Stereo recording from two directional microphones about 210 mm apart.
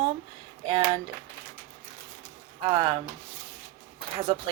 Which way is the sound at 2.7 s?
25° right (ahead or behind).